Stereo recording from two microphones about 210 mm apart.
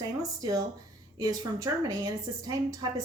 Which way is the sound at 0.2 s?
15° right (ahead or behind).